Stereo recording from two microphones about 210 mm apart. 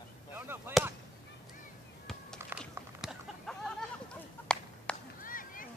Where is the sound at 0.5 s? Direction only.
10° right (ahead or behind).